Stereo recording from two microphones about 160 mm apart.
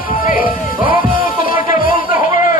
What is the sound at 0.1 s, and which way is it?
Music, 60° left (ahead or behind).